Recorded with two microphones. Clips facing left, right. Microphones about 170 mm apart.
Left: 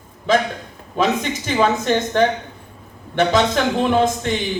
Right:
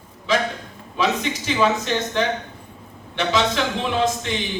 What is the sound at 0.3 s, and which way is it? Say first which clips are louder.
Speech: left 4 dB; 50° left (ahead or behind).